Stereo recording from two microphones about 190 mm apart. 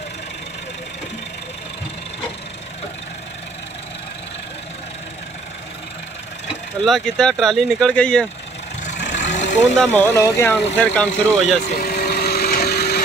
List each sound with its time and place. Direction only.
6.8 s speech: 5° left (ahead or behind)
9.1 s vehicle: 40° left (ahead or behind)
9.8 s speech: 10° left (ahead or behind)
11.8 s vehicle: 55° left (ahead or behind)